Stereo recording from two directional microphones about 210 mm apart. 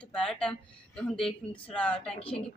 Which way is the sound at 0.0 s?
5° left (ahead or behind).